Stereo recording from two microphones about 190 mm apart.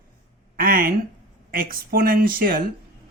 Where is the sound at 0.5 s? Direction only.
50° right (ahead or behind).